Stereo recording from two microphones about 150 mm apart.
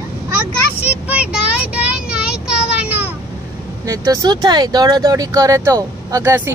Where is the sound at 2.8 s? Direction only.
10° right (ahead or behind).